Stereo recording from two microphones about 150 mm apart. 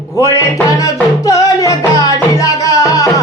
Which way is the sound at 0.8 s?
20° left (ahead or behind).